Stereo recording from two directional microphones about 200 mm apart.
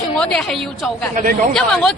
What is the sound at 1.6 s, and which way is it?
Speech, 5° left (ahead or behind).